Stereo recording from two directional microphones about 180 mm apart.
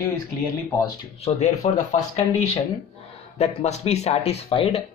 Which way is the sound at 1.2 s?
35° left (ahead or behind).